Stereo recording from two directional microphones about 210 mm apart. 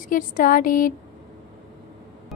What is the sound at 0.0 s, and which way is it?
Speech, 40° left (ahead or behind).